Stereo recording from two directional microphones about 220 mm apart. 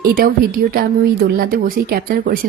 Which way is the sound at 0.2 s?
40° right (ahead or behind).